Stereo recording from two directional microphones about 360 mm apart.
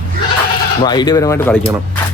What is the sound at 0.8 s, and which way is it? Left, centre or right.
Speech, centre.